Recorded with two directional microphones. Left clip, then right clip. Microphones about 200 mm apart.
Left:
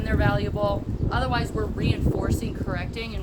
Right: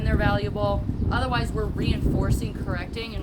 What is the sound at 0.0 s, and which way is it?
Speech, 5° left (ahead or behind).